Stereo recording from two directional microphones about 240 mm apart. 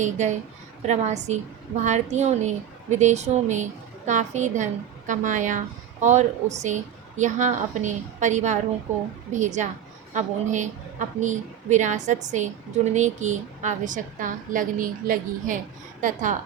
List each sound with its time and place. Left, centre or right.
0.0 s a woman's voice: right